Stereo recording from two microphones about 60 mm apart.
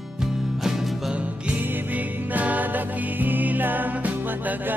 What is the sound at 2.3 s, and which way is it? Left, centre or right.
Music, right.